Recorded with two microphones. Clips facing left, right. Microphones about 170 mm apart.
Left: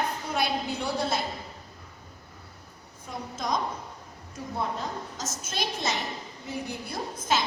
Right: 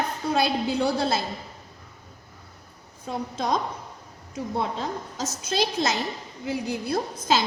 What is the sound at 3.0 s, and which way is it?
Speech, 60° right (ahead or behind).